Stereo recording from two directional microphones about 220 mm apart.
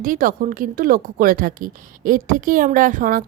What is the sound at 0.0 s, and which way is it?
Speech, 40° right (ahead or behind).